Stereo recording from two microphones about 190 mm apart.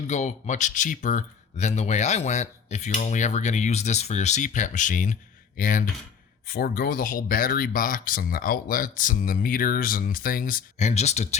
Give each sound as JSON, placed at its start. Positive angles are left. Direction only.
{"t": 0.1, "sound": "speech", "side_deg": 35}